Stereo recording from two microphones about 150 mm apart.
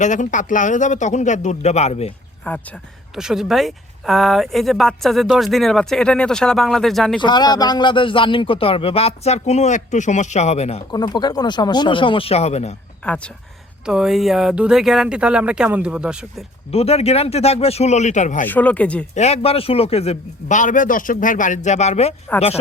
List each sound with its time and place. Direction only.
0.0 s a man's voice: 55° left (ahead or behind)
2.5 s speech: 10° left (ahead or behind)
3.2 s speech: 5° right (ahead or behind)
7.2 s speech: 30° left (ahead or behind); by 10.8 s 45° left (ahead or behind)
10.9 s speech: 25° left (ahead or behind); by 12.7 s 45° left (ahead or behind)
13.1 s speech: 5° left (ahead or behind)
13.8 s speech: 5° right (ahead or behind)
16.7 s a man's voice: 45° left (ahead or behind)
18.4 s speech: 10° left (ahead or behind)
19.1 s a man's voice: 45° left (ahead or behind)